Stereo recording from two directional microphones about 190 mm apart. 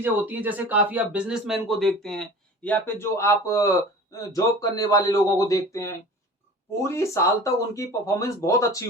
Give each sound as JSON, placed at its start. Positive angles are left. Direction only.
{"t": 0.0, "sound": "speech", "side_deg": -10}